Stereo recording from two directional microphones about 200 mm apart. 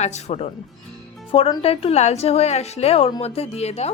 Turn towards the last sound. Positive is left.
turn(degrees=30)  # may be behind; listen again after turning